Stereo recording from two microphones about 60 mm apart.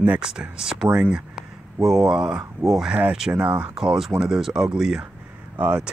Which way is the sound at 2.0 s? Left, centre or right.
Centre.